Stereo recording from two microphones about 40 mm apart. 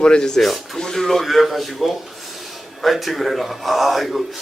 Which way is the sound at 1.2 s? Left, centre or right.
Centre.